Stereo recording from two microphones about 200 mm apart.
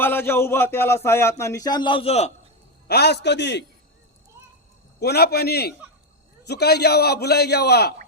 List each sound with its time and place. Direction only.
0.0 s speech: 10° left (ahead or behind); by 2.3 s 30° left (ahead or behind)
2.8 s a man's voice: 55° left (ahead or behind)
4.9 s a man's voice: 55° left (ahead or behind)